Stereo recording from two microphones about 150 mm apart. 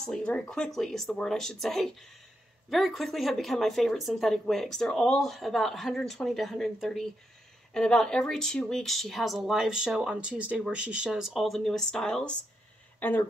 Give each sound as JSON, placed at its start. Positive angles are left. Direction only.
{"t": 0.0, "sound": "speech", "side_deg": 5}